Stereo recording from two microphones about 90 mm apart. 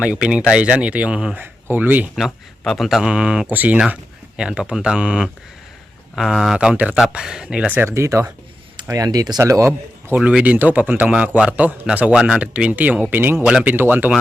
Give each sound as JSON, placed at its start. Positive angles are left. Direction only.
{"t": 0.0, "sound": "a man's voice", "side_deg": -10}
{"t": 2.1, "sound": "a man's voice", "side_deg": 0}
{"t": 7.7, "sound": "speech", "side_deg": -25}
{"t": 8.9, "sound": "speech", "side_deg": -45}
{"t": 9.4, "sound": "speech", "side_deg": -35}
{"t": 10.2, "sound": "a man's voice", "side_deg": -10}
{"t": 13.4, "sound": "a man's voice", "side_deg": -10}